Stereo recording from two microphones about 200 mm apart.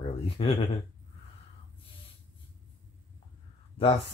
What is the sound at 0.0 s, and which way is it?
Speech, 25° left (ahead or behind).